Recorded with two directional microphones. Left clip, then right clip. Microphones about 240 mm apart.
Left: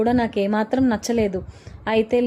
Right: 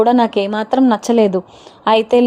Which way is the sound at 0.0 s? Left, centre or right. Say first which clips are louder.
Right 8 dB; centre.